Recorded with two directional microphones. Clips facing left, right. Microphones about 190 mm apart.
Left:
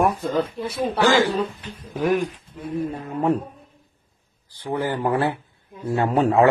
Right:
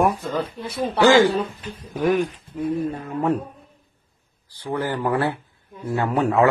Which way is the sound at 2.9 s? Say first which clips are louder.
Left 1 dB; 10° left (ahead or behind).